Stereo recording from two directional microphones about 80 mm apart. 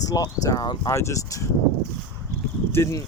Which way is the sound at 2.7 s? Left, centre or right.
Left.